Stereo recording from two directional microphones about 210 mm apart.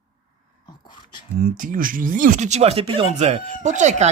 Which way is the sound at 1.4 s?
40° right (ahead or behind).